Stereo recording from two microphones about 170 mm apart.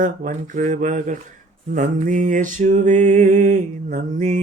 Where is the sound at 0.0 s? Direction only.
45° right (ahead or behind).